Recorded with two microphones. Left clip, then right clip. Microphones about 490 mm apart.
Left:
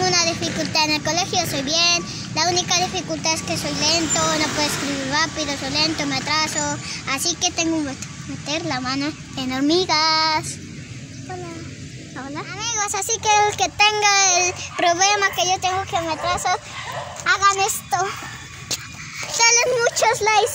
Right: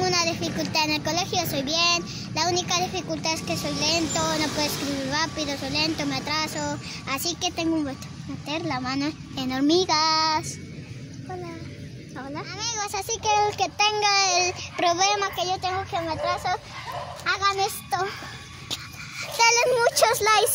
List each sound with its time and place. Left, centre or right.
0.0 s child singing: right
5.1 s speech: right
12.4 s a child's voice: right
19.1 s a child's voice: right